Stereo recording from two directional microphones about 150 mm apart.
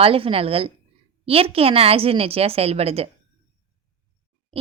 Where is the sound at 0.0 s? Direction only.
40° right (ahead or behind).